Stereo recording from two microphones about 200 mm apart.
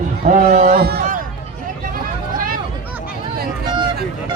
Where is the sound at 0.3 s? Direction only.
45° right (ahead or behind).